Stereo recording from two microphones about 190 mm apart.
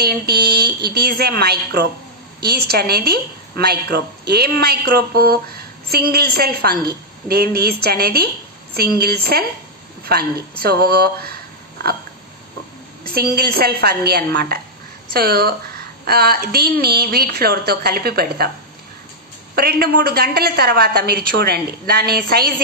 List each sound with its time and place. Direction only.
0.0 s a woman's voice: 60° right (ahead or behind)
13.0 s a woman's voice: 55° right (ahead or behind)
19.5 s a woman's voice: 55° right (ahead or behind)